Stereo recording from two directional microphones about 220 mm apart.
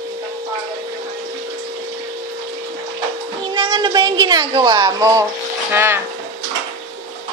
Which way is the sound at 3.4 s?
20° right (ahead or behind).